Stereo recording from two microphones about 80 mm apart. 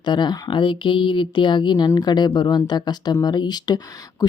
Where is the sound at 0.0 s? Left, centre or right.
Left.